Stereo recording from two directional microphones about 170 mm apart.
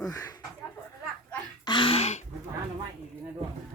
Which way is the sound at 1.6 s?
30° left (ahead or behind).